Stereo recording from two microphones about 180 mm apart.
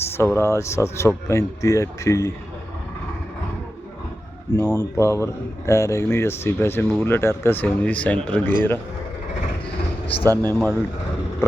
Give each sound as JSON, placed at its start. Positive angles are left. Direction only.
{"t": 0.0, "sound": "speech", "side_deg": 15}
{"t": 4.6, "sound": "speech", "side_deg": 20}
{"t": 10.3, "sound": "speech", "side_deg": 10}